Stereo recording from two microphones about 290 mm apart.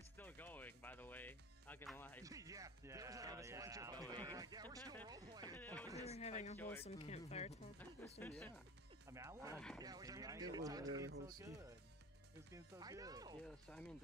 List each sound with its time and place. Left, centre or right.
0.2 s music: centre
2.2 s speech: centre
5.5 s speech: centre
6.0 s speech: left
7.8 s speech: centre
9.1 s speech: centre
13.5 s speech: centre